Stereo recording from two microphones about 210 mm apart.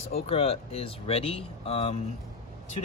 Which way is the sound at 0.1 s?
30° left (ahead or behind).